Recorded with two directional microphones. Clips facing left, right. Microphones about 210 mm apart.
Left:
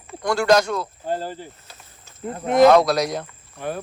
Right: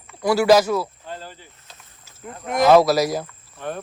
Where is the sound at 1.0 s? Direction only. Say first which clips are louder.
Left 9 dB; 45° left (ahead or behind).